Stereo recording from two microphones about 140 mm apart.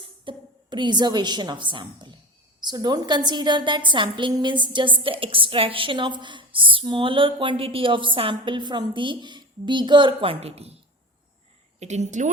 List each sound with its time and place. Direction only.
0.0 s a woman's voice: 35° right (ahead or behind)
11.8 s a woman's voice: 55° right (ahead or behind)